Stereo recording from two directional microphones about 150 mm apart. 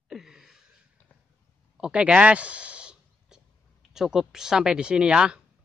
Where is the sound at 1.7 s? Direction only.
5° right (ahead or behind).